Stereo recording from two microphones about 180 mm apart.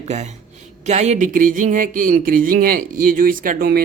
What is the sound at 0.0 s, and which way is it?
Speech, 40° right (ahead or behind).